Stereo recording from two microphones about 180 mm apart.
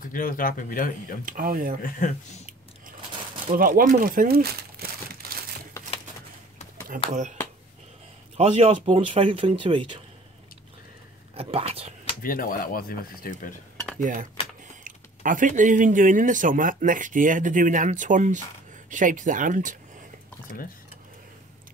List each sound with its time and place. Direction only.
0.1 s speech: 50° left (ahead or behind)
1.2 s speech: 50° right (ahead or behind)
1.8 s speech: 45° left (ahead or behind)
3.5 s speech: 50° right (ahead or behind)
7.1 s speech: 40° right (ahead or behind)
8.4 s speech: 35° right (ahead or behind)
11.3 s speech: 35° right (ahead or behind)
12.2 s speech: 50° left (ahead or behind)
13.9 s speech: 50° right (ahead or behind)